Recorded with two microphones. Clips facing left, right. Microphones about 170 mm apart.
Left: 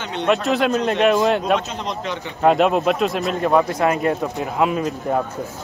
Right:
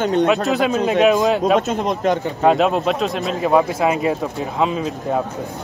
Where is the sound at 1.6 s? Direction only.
50° right (ahead or behind).